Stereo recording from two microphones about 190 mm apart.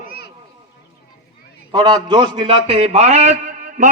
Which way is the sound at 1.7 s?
25° right (ahead or behind).